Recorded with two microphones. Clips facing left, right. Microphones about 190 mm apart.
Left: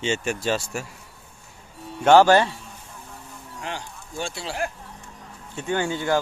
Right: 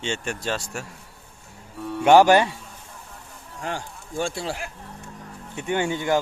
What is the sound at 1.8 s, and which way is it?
Music, 60° right (ahead or behind).